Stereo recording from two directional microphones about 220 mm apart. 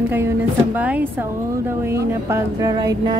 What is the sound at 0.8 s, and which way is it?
Speech, 5° right (ahead or behind).